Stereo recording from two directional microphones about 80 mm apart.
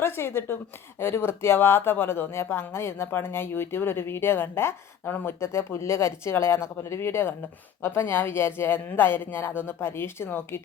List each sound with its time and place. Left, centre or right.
0.0 s a man's voice: left